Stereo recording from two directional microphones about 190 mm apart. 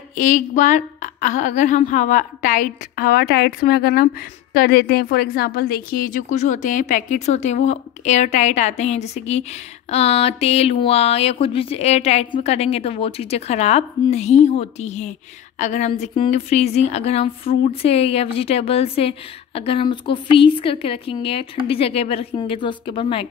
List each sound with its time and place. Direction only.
0.1 s a woman's voice: 40° left (ahead or behind)